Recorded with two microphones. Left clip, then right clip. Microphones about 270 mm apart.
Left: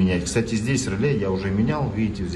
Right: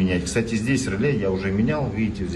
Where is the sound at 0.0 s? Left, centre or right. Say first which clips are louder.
Even; centre.